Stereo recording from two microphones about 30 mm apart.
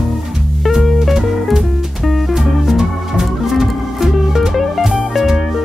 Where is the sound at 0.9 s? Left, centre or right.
Centre.